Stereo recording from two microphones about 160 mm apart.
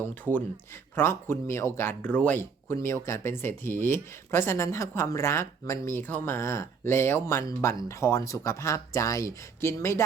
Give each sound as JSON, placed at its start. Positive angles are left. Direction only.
{"t": 0.0, "sound": "speech", "side_deg": 10}